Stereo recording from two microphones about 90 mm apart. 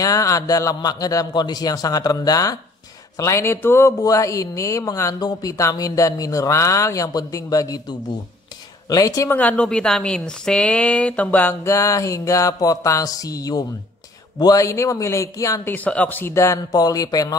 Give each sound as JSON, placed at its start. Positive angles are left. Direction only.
{"t": 0.0, "sound": "a man's voice", "side_deg": 40}
{"t": 8.8, "sound": "a man's voice", "side_deg": 45}
{"t": 9.3, "sound": "a woman's voice", "side_deg": 15}
{"t": 11.6, "sound": "a woman's voice", "side_deg": 35}
{"t": 15.6, "sound": "speech", "side_deg": 20}
{"t": 16.7, "sound": "a man's voice", "side_deg": 45}